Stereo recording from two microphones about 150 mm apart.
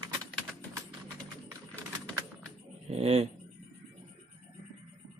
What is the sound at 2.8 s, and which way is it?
Speech, 45° right (ahead or behind).